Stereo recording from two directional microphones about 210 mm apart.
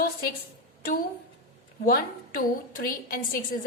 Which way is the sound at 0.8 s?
45° left (ahead or behind).